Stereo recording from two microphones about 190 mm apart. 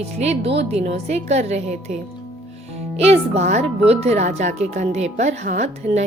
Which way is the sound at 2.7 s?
35° right (ahead or behind).